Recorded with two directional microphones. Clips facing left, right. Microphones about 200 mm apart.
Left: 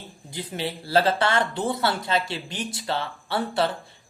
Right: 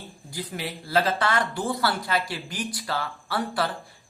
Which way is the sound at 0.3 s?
25° left (ahead or behind).